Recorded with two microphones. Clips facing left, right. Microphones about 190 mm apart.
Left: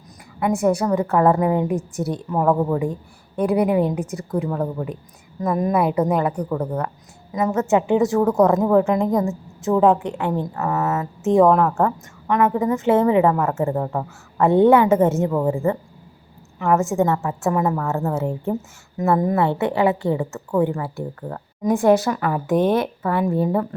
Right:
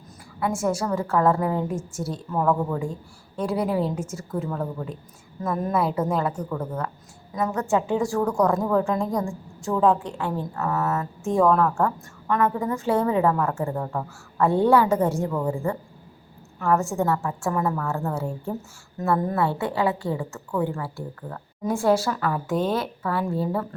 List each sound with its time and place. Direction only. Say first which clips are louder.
0.3 s a woman's voice: left 6 dB; 20° left (ahead or behind)
6.5 s speech: left 5 dB; 35° left (ahead or behind)
7.3 s a woman's voice: left 5 dB; 20° left (ahead or behind)